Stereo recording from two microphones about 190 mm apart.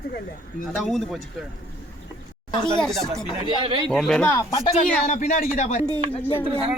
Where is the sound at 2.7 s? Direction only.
5° left (ahead or behind).